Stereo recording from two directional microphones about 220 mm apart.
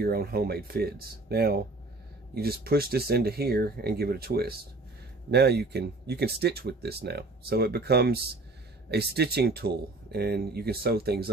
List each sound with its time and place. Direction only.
0.0 s speech: 45° right (ahead or behind)